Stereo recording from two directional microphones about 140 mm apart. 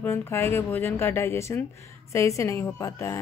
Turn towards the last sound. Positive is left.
turn(degrees=20)  # may be behind; listen again after turning